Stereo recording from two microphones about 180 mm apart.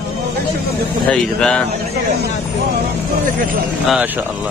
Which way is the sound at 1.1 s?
5° left (ahead or behind).